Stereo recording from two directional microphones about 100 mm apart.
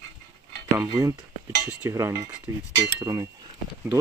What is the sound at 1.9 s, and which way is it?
Speech, 30° right (ahead or behind).